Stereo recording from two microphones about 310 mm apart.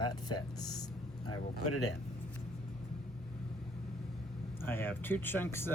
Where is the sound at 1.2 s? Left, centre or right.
Left.